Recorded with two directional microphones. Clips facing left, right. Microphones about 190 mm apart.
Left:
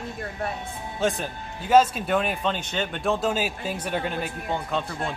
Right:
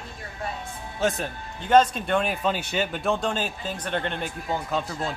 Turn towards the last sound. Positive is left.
turn(degrees=0)  # may be behind; listen again after turning